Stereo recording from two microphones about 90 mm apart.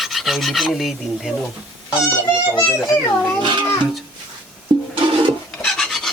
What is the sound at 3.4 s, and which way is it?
Speech, 65° right (ahead or behind).